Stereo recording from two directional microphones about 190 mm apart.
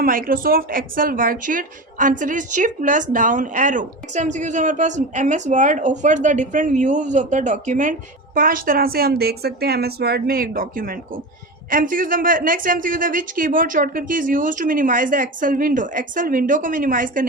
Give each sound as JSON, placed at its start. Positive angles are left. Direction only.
{"t": 0.0, "sound": "a woman's voice", "side_deg": -50}